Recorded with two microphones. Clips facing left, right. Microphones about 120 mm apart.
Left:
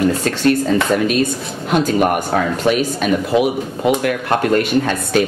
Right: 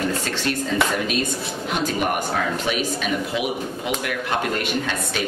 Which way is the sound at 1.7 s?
40° left (ahead or behind).